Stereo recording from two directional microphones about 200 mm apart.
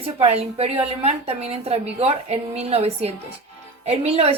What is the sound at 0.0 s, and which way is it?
Speech, 30° right (ahead or behind).